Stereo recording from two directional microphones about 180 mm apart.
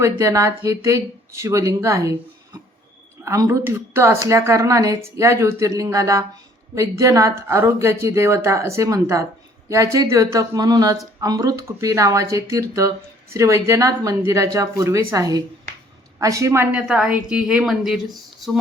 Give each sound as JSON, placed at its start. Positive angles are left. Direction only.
{"t": 0.0, "sound": "a woman's voice", "side_deg": -15}